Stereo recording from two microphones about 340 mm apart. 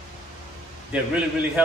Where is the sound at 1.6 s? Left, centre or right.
Centre.